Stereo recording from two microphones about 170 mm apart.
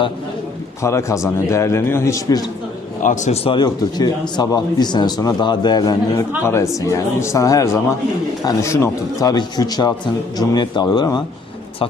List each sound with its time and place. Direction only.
0.8 s a man's voice: 15° left (ahead or behind)
3.0 s a man's voice: 45° left (ahead or behind)
3.5 s a man's voice: 25° left (ahead or behind)